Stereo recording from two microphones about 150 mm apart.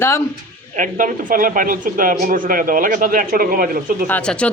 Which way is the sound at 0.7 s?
65° right (ahead or behind).